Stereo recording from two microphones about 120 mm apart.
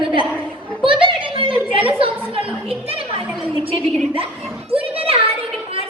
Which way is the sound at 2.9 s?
55° right (ahead or behind).